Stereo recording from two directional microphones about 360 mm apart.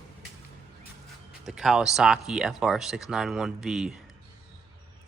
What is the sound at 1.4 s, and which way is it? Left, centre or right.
Speech, centre.